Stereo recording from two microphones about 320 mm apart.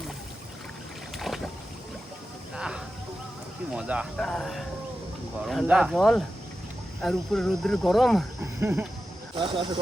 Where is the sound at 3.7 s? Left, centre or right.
Centre.